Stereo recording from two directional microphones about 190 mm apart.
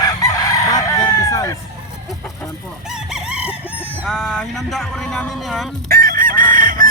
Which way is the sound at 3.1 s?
5° right (ahead or behind).